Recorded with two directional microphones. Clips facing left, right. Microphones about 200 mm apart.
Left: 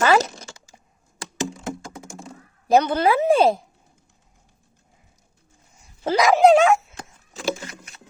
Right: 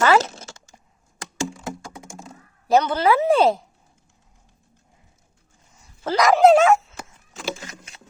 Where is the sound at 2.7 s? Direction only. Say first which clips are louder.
Even; 15° left (ahead or behind).